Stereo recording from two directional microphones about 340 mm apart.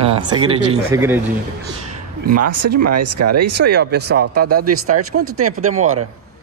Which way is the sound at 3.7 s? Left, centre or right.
Right.